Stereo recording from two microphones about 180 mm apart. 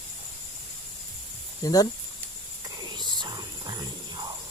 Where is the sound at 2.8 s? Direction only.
25° right (ahead or behind).